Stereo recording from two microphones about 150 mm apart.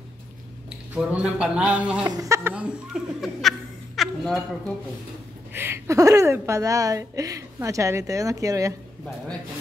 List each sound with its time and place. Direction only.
0.7 s speech: 5° right (ahead or behind)
2.0 s a woman's voice: 20° right (ahead or behind)
2.5 s speech: 5° right (ahead or behind)
5.5 s a woman's voice: 15° right (ahead or behind)